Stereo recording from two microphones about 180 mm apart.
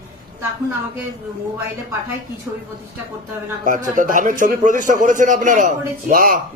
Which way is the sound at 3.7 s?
45° right (ahead or behind).